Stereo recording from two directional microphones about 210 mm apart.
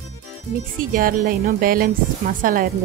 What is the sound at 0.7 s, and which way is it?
Speech, 40° right (ahead or behind).